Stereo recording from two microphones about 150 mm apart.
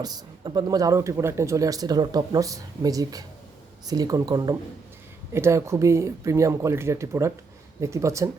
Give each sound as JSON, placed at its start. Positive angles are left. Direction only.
{"t": 0.0, "sound": "speech", "side_deg": -25}